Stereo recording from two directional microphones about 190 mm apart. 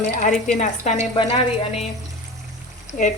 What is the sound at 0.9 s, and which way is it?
Speech, 40° left (ahead or behind).